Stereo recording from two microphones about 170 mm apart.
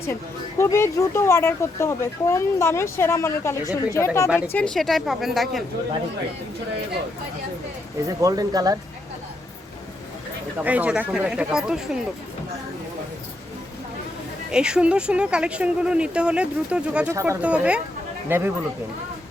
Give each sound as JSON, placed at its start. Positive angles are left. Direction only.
{"t": 0.6, "sound": "speech", "side_deg": 15}
{"t": 4.5, "sound": "speech", "side_deg": 5}
{"t": 8.0, "sound": "speech", "side_deg": -20}
{"t": 10.6, "sound": "speech", "side_deg": -10}
{"t": 14.5, "sound": "speech", "side_deg": -5}